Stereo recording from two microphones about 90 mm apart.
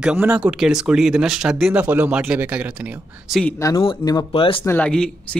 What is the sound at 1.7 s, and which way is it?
Speech, 20° right (ahead or behind).